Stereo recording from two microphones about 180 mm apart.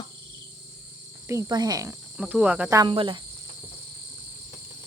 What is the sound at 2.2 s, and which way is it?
Cricket, 5° right (ahead or behind).